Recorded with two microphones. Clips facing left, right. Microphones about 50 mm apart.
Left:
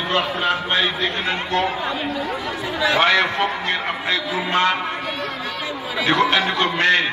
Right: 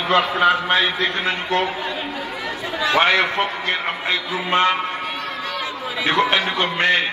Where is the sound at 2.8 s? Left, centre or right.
Right.